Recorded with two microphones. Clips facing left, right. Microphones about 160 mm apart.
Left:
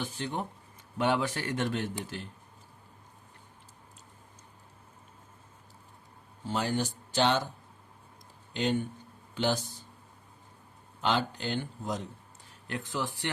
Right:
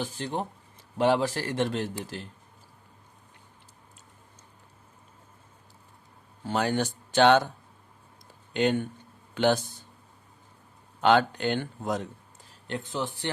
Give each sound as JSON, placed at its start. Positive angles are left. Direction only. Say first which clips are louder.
{"t": 0.0, "sound": "speech", "louder": "right 3 dB", "side_deg": -35}
{"t": 6.5, "sound": "speech", "louder": "right 4 dB", "side_deg": -65}
{"t": 8.5, "sound": "speech", "louder": "right 4 dB", "side_deg": -60}
{"t": 11.0, "sound": "speech", "louder": "right 8 dB", "side_deg": -65}
{"t": 12.6, "sound": "speech", "louder": "right 2 dB", "side_deg": -25}